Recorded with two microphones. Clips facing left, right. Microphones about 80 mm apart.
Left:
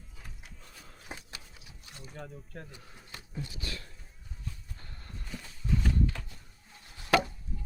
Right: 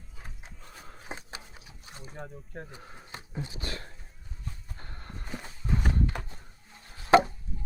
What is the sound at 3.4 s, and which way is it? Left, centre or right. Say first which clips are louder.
Speech: right 3 dB; right.